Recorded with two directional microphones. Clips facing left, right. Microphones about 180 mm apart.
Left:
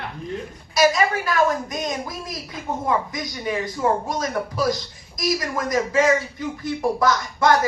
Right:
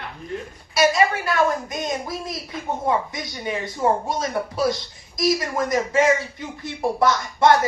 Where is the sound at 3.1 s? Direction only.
25° right (ahead or behind).